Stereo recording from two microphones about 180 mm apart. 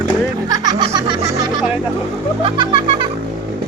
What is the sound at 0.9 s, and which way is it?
Music, 35° right (ahead or behind).